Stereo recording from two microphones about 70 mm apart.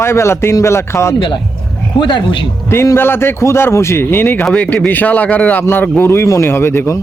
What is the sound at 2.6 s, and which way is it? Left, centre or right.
A man's voice, left.